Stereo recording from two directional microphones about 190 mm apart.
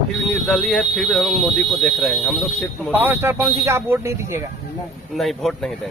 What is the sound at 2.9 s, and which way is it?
Speech, 10° right (ahead or behind).